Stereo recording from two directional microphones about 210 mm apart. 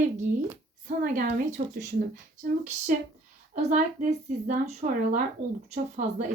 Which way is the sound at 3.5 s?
35° right (ahead or behind).